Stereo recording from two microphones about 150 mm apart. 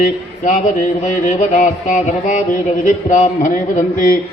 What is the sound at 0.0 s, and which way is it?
A man's voice, 60° left (ahead or behind).